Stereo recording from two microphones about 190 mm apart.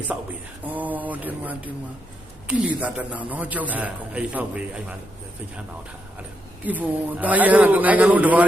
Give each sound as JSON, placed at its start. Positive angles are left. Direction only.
{"t": 0.6, "sound": "a man's voice", "side_deg": -10}
{"t": 6.7, "sound": "a man's voice", "side_deg": -10}